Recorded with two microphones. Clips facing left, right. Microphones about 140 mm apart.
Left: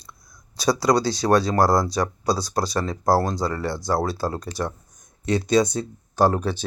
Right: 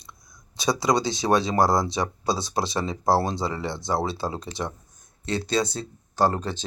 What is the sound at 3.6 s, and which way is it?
Speech, 20° right (ahead or behind).